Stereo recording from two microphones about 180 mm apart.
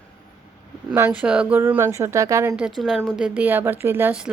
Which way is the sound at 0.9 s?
10° right (ahead or behind).